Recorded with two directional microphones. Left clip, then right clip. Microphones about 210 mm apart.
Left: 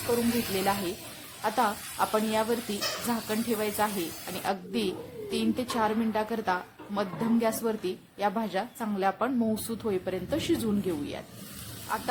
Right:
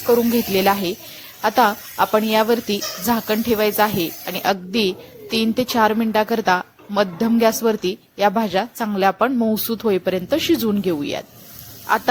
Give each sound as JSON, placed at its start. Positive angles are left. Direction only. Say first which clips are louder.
{"t": 0.6, "sound": "a woman's voice", "louder": "right 11 dB", "side_deg": -35}